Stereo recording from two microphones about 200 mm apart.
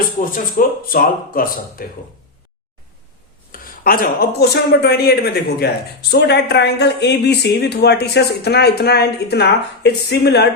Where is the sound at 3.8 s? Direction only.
45° left (ahead or behind).